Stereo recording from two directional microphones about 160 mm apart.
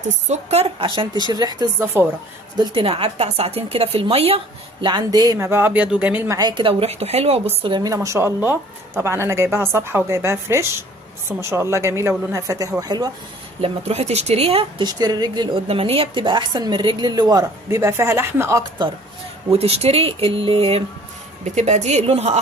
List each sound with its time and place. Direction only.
0.3 s speech: 40° right (ahead or behind); by 1.7 s 25° right (ahead or behind)
1.8 s a woman's voice: 15° right (ahead or behind)
2.6 s speech: 35° right (ahead or behind)
4.8 s a woman's voice: 25° right (ahead or behind)
13.6 s speech: 40° right (ahead or behind); by 15.6 s 25° right (ahead or behind)
15.6 s speech: 35° right (ahead or behind); by 18.6 s 15° right (ahead or behind)
19.5 s speech: 40° right (ahead or behind)